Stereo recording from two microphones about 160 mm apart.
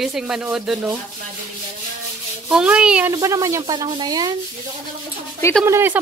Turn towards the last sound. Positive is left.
turn(degrees=-15)  # may be behind; listen again after turning